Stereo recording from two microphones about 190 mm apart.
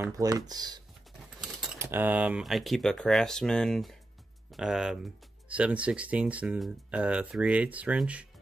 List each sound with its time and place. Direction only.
0.0 s speech: 20° right (ahead or behind)
1.4 s typing: centre (ahead or behind)
1.8 s speech: 10° right (ahead or behind)